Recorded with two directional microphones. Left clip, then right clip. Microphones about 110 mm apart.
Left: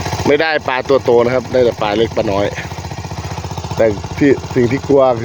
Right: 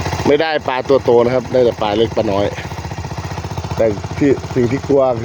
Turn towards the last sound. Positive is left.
turn(degrees=15)  # may be behind; listen again after turning